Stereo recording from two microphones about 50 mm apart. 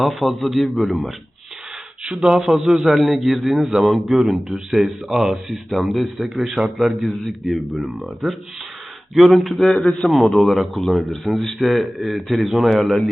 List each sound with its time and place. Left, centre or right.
0.0 s speech: centre
2.0 s a man's voice: centre
9.7 s speech: centre
10.1 s speech: centre